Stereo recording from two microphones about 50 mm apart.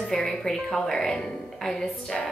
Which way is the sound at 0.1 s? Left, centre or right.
Centre.